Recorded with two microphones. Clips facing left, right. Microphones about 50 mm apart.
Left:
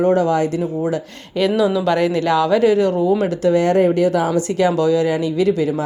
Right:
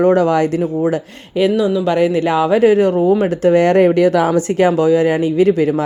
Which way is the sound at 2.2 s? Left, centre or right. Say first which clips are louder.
Right 2 dB; centre.